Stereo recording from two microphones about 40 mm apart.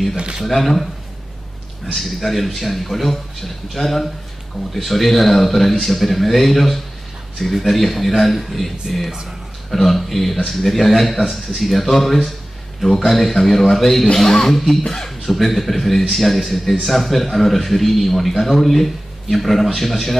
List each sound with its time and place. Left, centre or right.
0.2 s speech: right
0.5 s speech: centre
2.0 s speech: centre